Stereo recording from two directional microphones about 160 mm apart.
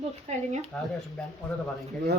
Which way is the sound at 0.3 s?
45° right (ahead or behind).